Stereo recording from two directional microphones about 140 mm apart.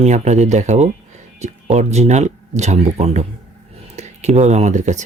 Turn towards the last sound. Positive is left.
turn(degrees=-60)  # may be behind; listen again after turning